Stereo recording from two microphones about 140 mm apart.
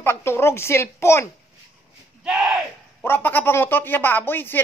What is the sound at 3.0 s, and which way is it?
A woman's voice, 15° left (ahead or behind).